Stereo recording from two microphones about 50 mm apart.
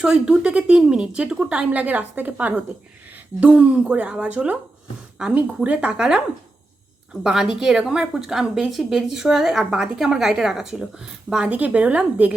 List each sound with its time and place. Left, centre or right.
0.0 s speech: centre; by 4.5 s right
5.2 s a woman's voice: centre
11.4 s speech: right